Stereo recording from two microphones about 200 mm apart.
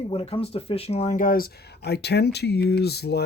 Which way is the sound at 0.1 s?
30° left (ahead or behind).